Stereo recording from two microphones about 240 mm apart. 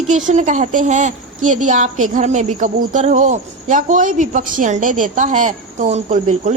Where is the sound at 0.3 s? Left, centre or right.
Right.